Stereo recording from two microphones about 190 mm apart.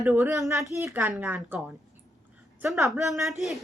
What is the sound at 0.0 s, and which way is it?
A woman's voice, 10° right (ahead or behind).